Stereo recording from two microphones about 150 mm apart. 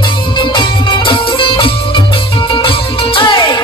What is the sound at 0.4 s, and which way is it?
Music, 30° left (ahead or behind).